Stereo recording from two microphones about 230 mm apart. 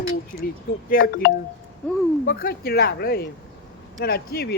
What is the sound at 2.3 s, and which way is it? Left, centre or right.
Speech, left.